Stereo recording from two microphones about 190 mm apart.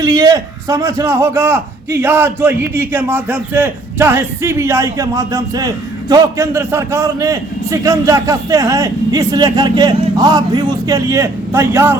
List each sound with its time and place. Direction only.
0.0 s a man's voice: 20° right (ahead or behind)